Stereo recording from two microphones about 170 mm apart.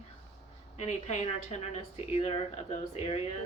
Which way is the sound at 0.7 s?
45° left (ahead or behind).